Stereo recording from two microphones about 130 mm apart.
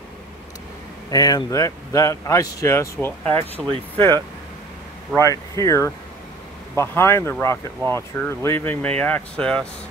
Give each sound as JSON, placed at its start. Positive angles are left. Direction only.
{"t": 1.1, "sound": "speech", "side_deg": 30}
{"t": 3.6, "sound": "speech", "side_deg": -5}
{"t": 5.1, "sound": "speech", "side_deg": 25}